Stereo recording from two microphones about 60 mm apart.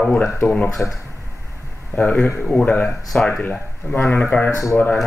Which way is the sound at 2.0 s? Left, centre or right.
Left.